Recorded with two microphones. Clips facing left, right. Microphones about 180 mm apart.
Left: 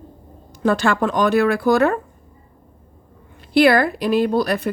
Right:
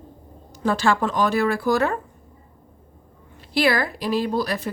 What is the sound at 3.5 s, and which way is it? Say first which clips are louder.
Speech: left 7 dB; 55° left (ahead or behind).